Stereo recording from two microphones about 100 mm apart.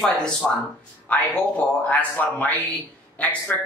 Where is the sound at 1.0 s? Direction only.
15° left (ahead or behind).